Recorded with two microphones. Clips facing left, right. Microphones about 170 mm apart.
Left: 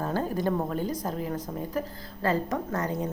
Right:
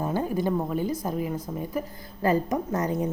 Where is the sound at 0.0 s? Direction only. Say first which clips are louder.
Right 2 dB; 10° right (ahead or behind).